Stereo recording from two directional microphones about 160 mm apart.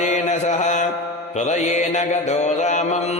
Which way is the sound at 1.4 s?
45° left (ahead or behind).